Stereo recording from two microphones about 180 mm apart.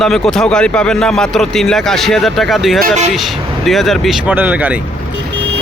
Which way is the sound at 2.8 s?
40° right (ahead or behind).